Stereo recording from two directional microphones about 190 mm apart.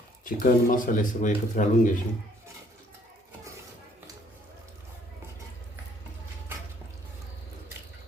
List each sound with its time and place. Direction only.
0.3 s speech: 45° left (ahead or behind)